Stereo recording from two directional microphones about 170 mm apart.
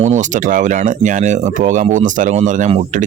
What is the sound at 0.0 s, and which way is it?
Speech, 45° right (ahead or behind).